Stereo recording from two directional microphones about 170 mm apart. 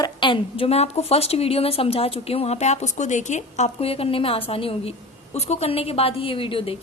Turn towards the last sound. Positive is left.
turn(degrees=30)  # may be behind; listen again after turning